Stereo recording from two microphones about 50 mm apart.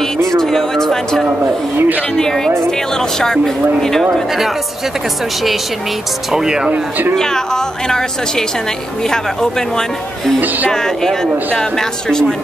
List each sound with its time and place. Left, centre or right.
0.0 s a sound: centre
1.4 s speech: right
2.1 s a woman's voice: centre
4.1 s speech: centre
6.3 s speech: centre
6.7 s speech: right
7.2 s a woman's voice: centre